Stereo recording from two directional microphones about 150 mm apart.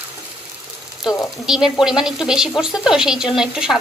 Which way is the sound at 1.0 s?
5° right (ahead or behind).